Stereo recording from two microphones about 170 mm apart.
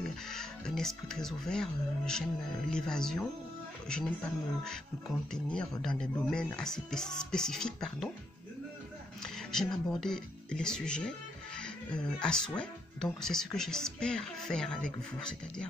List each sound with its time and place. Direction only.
0.0 s speech: 5° left (ahead or behind)
9.2 s speech: 5° left (ahead or behind)